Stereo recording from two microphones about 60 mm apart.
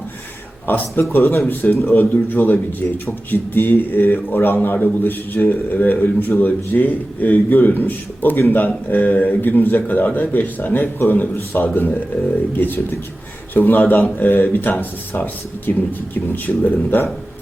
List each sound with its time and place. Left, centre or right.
0.7 s a man's voice: left